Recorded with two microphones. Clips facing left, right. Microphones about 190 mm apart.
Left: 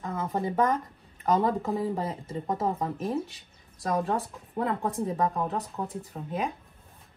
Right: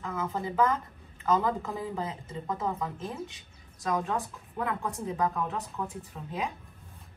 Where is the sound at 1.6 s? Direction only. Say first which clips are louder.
Left 5 dB; 35° left (ahead or behind).